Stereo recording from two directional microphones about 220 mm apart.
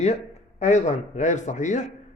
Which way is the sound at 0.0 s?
30° left (ahead or behind).